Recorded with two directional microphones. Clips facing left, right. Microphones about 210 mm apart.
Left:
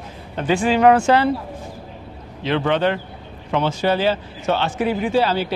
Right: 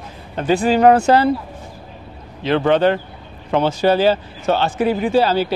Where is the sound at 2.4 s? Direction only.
40° right (ahead or behind).